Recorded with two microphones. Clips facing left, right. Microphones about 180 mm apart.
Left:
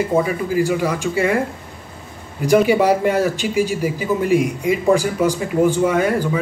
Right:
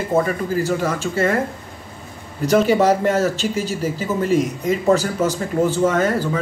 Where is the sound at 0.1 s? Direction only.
10° left (ahead or behind).